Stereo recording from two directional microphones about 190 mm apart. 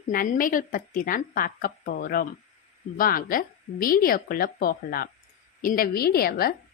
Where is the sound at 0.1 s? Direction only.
45° left (ahead or behind).